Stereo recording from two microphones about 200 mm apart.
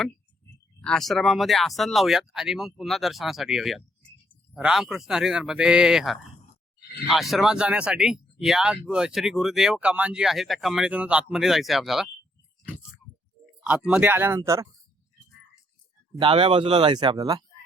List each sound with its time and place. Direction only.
0.8 s speech: 5° left (ahead or behind)
13.7 s speech: 5° right (ahead or behind)
16.1 s speech: 25° right (ahead or behind)